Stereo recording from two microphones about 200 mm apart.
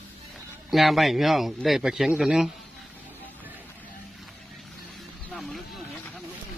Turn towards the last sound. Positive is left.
turn(degrees=5)  # may be behind; listen again after turning